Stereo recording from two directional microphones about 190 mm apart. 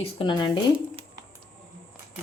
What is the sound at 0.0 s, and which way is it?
Speech, 25° left (ahead or behind).